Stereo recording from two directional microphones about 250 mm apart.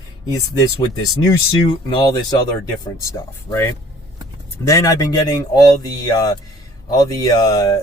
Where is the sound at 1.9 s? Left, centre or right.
Centre.